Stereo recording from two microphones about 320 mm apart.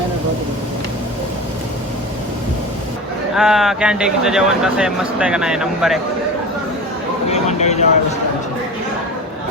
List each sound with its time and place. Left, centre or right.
3.3 s speech: centre
7.3 s vehicle: left